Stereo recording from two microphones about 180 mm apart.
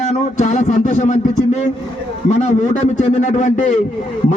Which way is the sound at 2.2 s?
40° left (ahead or behind).